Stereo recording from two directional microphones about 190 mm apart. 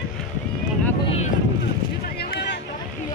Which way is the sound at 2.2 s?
60° left (ahead or behind).